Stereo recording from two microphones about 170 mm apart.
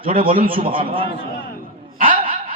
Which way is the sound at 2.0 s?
55° right (ahead or behind).